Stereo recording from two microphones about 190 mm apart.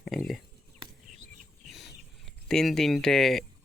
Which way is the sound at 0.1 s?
Centre (ahead or behind).